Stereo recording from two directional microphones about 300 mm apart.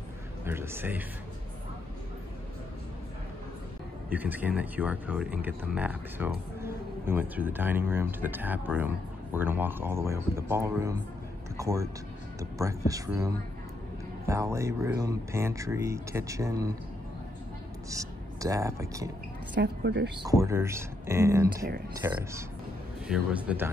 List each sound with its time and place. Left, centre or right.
0.5 s speech: centre
4.1 s speech: centre
17.8 s speech: centre
19.5 s a woman's voice: right
20.2 s speech: centre